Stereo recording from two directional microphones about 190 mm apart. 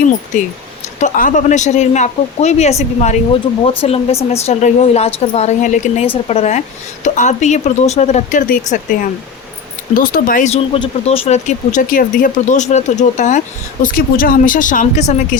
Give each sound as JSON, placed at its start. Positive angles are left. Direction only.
{"t": 0.9, "sound": "speech", "side_deg": 40}
{"t": 10.8, "sound": "speech", "side_deg": 30}
{"t": 13.8, "sound": "speech", "side_deg": 50}